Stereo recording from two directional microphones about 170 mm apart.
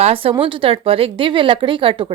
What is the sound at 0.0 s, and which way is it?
A woman's voice, 35° right (ahead or behind).